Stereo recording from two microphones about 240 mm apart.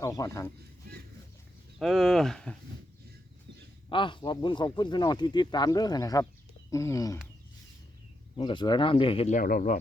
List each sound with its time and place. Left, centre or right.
0.0 s speech: centre
1.8 s speech: centre
3.8 s speech: centre
8.4 s speech: centre; by 9.8 s left